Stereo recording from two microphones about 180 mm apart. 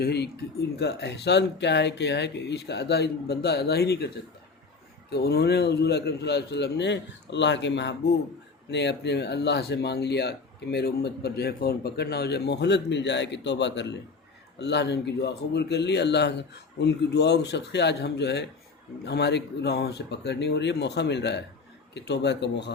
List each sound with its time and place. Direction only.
0.0 s speech: 65° left (ahead or behind)
5.1 s speech: 60° left (ahead or behind)